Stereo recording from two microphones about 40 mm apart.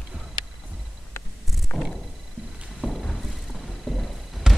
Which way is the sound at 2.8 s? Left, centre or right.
Centre.